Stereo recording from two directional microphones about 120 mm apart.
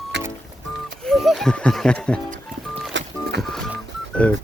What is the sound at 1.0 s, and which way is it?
Music, centre (ahead or behind).